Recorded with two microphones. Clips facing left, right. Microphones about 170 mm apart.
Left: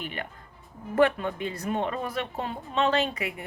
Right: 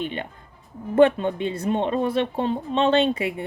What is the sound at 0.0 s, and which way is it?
Speech, 25° right (ahead or behind).